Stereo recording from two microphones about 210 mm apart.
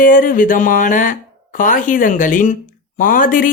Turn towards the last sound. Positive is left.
turn(degrees=40)  # may be behind; listen again after turning